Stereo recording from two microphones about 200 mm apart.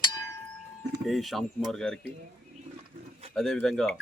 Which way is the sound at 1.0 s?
Centre (ahead or behind).